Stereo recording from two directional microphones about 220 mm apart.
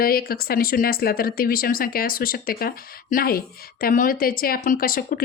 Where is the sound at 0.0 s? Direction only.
40° left (ahead or behind).